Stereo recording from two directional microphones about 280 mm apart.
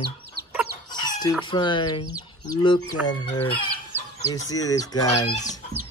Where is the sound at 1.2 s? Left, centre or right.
Centre.